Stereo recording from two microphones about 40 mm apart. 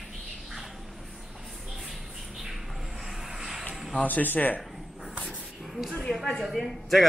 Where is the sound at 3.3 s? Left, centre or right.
Centre.